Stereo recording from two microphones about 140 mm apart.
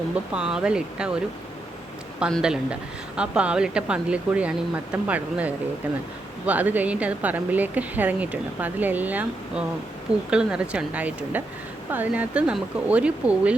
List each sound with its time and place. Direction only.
0.3 s speech: 5° right (ahead or behind)
2.3 s speech: 5° right (ahead or behind)